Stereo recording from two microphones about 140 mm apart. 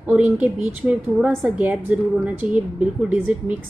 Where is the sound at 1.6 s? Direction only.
10° right (ahead or behind).